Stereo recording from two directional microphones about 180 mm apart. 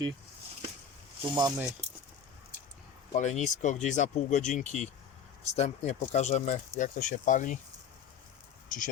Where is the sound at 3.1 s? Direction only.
40° left (ahead or behind).